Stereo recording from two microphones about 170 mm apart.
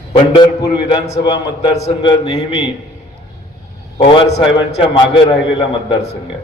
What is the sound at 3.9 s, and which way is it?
Speech, 30° left (ahead or behind).